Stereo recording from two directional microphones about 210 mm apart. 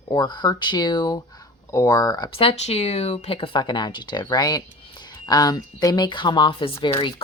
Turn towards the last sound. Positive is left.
turn(degrees=25)  # may be behind; listen again after turning